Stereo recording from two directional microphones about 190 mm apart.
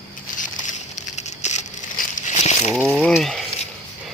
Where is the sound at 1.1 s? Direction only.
35° left (ahead or behind).